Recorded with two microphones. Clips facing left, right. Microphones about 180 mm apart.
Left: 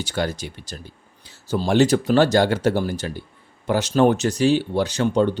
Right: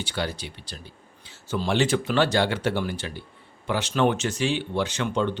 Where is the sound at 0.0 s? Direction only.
45° left (ahead or behind).